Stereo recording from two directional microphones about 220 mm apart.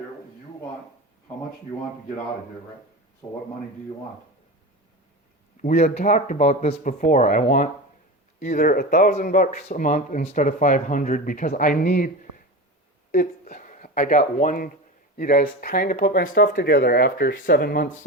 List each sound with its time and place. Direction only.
3.2 s speech: 15° left (ahead or behind)
5.6 s speech: 30° left (ahead or behind)